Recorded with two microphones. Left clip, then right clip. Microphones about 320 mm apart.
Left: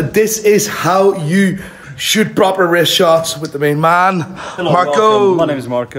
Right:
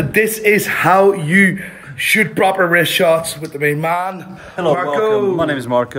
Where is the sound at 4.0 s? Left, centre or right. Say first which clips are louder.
Left 9 dB; left.